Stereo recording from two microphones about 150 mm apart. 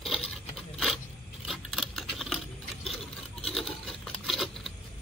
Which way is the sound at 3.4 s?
Centre (ahead or behind).